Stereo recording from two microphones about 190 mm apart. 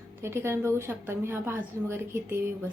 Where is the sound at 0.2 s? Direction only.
15° right (ahead or behind).